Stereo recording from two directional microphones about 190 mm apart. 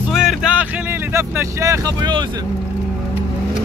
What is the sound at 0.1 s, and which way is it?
Vehicle, centre (ahead or behind).